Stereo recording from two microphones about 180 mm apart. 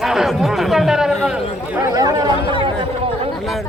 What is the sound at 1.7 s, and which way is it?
Speech, 20° right (ahead or behind).